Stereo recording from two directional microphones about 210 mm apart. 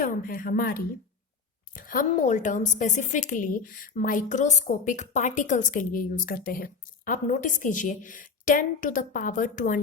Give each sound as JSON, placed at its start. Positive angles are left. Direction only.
{"t": 0.0, "sound": "a woman's voice", "side_deg": 40}